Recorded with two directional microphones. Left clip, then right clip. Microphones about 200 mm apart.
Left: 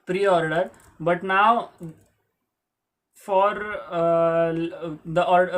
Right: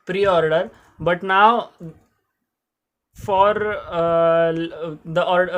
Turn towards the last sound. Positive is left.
turn(degrees=-40)  # may be behind; listen again after turning